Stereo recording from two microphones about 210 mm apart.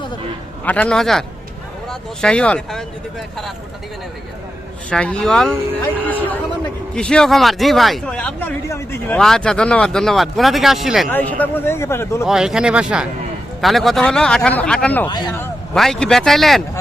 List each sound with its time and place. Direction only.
0.6 s a man's voice: 5° left (ahead or behind)
4.9 s a man's voice: 5° left (ahead or behind)
12.2 s a man's voice: 5° right (ahead or behind)
15.0 s speech: 20° left (ahead or behind)
15.7 s a man's voice: centre (ahead or behind)